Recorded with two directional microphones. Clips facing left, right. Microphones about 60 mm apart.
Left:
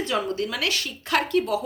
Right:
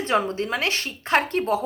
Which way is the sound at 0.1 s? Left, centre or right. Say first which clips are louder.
Right 6 dB; right.